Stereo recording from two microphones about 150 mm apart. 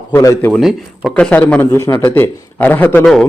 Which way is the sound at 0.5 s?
Centre (ahead or behind).